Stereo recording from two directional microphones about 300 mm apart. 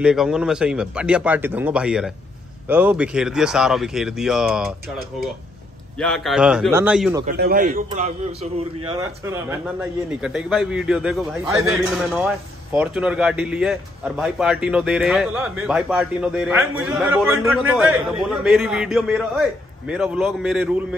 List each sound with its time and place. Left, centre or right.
0.0 s speech: centre
5.9 s speech: centre
7.2 s a man's voice: right; by 20.7 s centre